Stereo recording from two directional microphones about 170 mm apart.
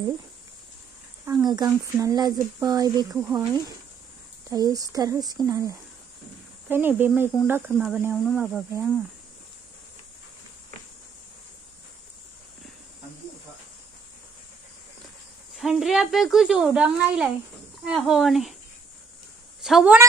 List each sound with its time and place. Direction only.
1.2 s a woman's voice: 20° right (ahead or behind); by 8.6 s centre (ahead or behind)
15.5 s a woman's voice: centre (ahead or behind)
19.6 s a woman's voice: 5° right (ahead or behind)